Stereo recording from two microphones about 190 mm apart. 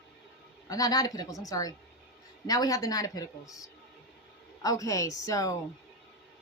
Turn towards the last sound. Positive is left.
turn(degrees=15)  # may be behind; listen again after turning